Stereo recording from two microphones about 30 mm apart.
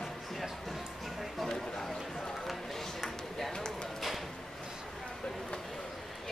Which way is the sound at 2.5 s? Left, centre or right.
Centre.